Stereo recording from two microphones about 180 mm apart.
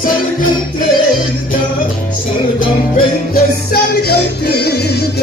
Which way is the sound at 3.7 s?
60° left (ahead or behind).